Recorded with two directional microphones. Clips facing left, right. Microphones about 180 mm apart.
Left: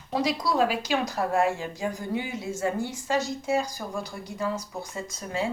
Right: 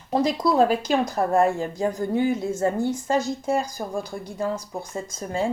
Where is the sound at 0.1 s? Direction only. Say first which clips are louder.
Right 5 dB; 50° right (ahead or behind).